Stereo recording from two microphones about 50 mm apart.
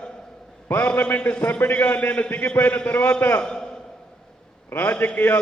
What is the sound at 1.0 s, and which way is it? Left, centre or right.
A man's voice, left.